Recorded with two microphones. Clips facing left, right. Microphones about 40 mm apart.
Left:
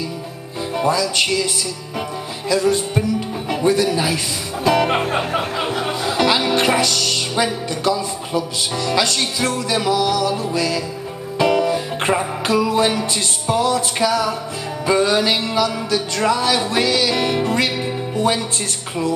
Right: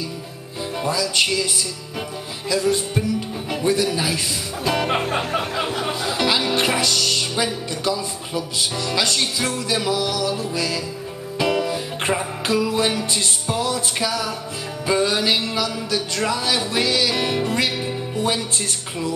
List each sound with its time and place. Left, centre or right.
0.7 s music: centre
2.5 s music: centre
3.4 s speech: centre
7.8 s music: centre